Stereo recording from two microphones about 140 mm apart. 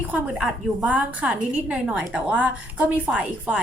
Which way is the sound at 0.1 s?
10° right (ahead or behind).